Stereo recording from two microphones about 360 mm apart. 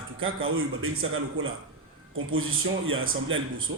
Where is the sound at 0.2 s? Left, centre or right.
Right.